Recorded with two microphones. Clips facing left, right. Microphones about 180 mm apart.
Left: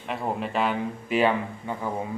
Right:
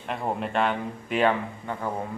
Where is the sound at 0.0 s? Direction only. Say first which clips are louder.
Even; centre (ahead or behind).